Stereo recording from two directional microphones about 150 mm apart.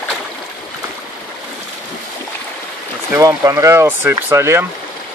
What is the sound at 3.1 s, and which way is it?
Speech, 20° right (ahead or behind).